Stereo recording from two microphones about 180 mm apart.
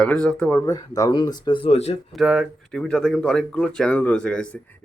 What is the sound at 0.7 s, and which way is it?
Speech, 20° left (ahead or behind).